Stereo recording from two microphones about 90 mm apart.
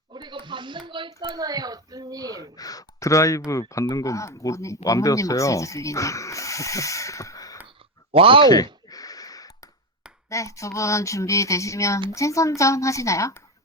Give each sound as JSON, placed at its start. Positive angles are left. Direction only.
{"t": 0.1, "sound": "speech", "side_deg": -60}
{"t": 1.3, "sound": "a woman's voice", "side_deg": -45}
{"t": 2.6, "sound": "speech", "side_deg": 40}
{"t": 8.1, "sound": "speech", "side_deg": -80}
{"t": 8.4, "sound": "a sound", "side_deg": 45}
{"t": 10.2, "sound": "speech", "side_deg": 35}